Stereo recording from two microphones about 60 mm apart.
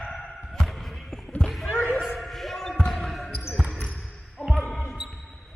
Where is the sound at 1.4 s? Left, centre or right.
Centre.